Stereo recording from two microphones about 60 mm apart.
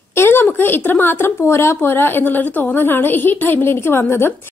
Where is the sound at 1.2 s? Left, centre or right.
Left.